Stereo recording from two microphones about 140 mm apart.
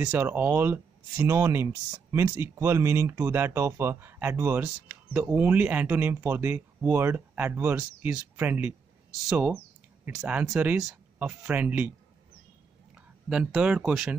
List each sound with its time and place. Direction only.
0.0 s speech: 10° right (ahead or behind)
10.1 s speech: 10° right (ahead or behind)
13.3 s speech: 5° right (ahead or behind)